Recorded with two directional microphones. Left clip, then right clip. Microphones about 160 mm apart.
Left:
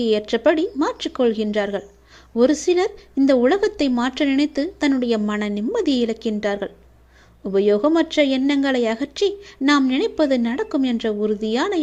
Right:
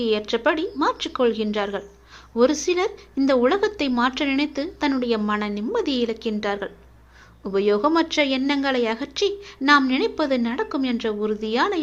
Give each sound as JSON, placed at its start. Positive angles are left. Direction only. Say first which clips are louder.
{"t": 0.0, "sound": "speech", "louder": "left 3 dB", "side_deg": 45}